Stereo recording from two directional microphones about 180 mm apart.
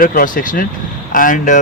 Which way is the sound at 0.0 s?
50° left (ahead or behind).